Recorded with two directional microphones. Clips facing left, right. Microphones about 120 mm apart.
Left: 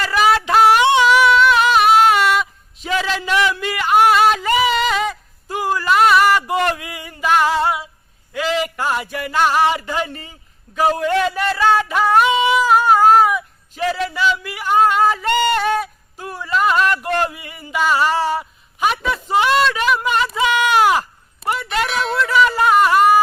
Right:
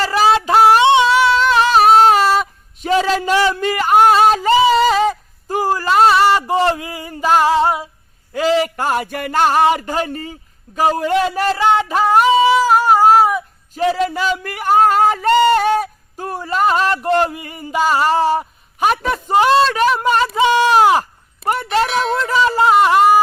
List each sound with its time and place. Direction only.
0.0 s a sound: 30° right (ahead or behind)
8.3 s speech: 35° right (ahead or behind)
10.7 s a sound: 35° right (ahead or behind)
11.3 s speech: 35° right (ahead or behind)
11.6 s speech: 20° right (ahead or behind)
11.9 s speech: 30° right (ahead or behind)
12.2 s a sound: 35° right (ahead or behind)
15.8 s a man's voice: 45° right (ahead or behind); by 17.3 s 30° right (ahead or behind)
17.3 s a man's voice: 40° right (ahead or behind)
21.0 s a sound: 45° right (ahead or behind)
21.8 s speech: centre (ahead or behind)
22.2 s speech: 30° right (ahead or behind)